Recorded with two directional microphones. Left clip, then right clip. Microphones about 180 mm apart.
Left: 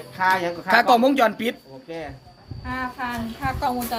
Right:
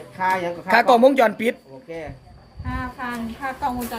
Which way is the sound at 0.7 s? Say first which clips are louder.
Right 2 dB; 20° right (ahead or behind).